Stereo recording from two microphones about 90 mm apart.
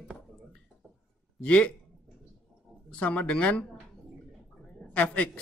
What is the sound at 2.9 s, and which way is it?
Speech, 10° left (ahead or behind).